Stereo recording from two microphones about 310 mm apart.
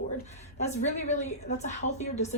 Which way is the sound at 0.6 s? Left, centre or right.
Left.